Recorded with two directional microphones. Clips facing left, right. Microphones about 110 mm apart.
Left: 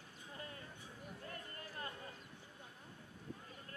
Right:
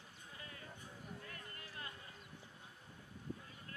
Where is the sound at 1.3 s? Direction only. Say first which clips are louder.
Left 3 dB; 35° left (ahead or behind).